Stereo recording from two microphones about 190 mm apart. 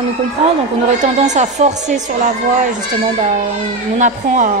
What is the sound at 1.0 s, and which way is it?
A woman's voice, 40° right (ahead or behind).